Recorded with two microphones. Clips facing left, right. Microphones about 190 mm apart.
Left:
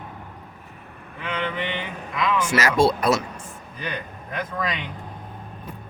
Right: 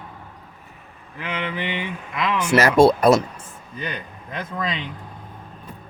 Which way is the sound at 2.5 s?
55° right (ahead or behind).